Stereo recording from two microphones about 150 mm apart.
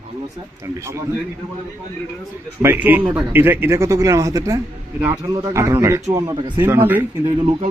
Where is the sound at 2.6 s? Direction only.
15° right (ahead or behind).